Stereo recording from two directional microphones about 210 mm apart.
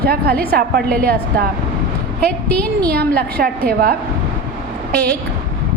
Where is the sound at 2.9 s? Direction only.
45° right (ahead or behind).